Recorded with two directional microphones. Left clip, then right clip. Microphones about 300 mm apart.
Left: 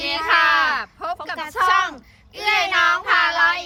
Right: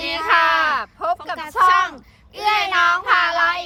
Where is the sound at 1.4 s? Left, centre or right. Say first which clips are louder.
Right 2 dB; centre.